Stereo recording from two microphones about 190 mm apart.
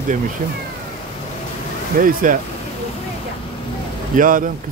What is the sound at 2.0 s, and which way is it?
Speech, 45° right (ahead or behind).